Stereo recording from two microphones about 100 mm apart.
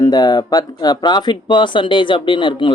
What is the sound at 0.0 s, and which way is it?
Speech, 40° left (ahead or behind).